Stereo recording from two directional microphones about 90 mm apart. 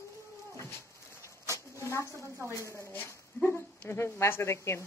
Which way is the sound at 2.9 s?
25° left (ahead or behind).